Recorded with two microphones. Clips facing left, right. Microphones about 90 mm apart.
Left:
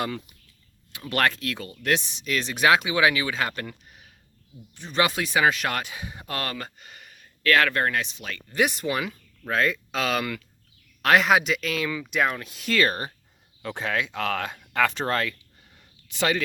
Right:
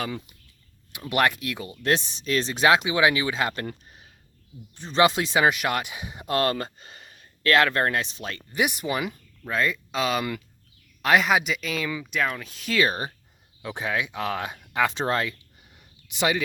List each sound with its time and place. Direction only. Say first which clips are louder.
0.9 s speech: right 1 dB; 15° right (ahead or behind)
1.8 s speech: right 1 dB; 35° right (ahead or behind)
4.7 s speech: right 4 dB; 30° right (ahead or behind)
5.5 s speech: right 2 dB; 10° right (ahead or behind); by 8.4 s 35° right (ahead or behind)
8.5 s speech: left 1 dB; 10° right (ahead or behind)
12.9 s speech: right 1 dB; 20° right (ahead or behind)